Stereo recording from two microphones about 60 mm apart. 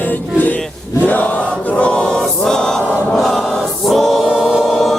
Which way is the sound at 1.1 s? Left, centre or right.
Left.